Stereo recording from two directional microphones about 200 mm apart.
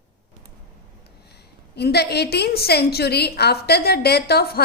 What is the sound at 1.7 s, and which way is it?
A woman's voice, 55° left (ahead or behind).